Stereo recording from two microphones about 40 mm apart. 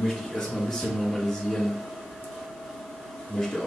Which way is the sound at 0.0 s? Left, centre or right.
Centre.